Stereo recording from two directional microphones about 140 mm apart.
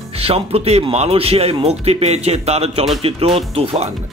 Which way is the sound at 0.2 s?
45° right (ahead or behind).